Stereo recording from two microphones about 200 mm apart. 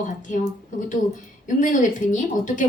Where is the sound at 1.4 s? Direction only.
40° left (ahead or behind).